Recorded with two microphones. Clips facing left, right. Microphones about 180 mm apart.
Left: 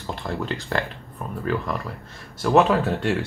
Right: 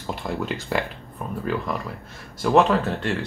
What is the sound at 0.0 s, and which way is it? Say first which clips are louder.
Speech: right 1 dB; 10° right (ahead or behind).